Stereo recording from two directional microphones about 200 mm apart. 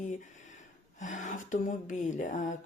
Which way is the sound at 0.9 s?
40° left (ahead or behind).